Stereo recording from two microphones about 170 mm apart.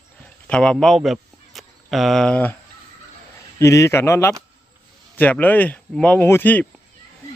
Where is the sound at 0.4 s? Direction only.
5° left (ahead or behind).